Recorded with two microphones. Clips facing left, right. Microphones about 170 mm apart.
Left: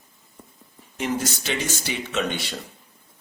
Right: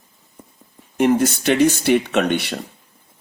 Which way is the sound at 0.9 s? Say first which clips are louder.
Right 10 dB; 55° right (ahead or behind).